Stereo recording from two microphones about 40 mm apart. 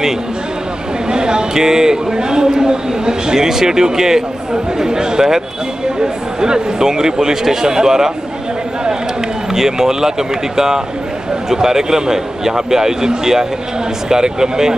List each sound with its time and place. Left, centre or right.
1.1 s a man's voice: centre
9.5 s a man's voice: centre